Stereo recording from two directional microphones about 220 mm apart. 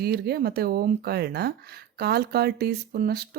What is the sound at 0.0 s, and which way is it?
Speech, 45° right (ahead or behind).